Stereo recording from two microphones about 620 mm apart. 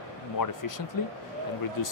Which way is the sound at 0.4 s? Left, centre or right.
Left.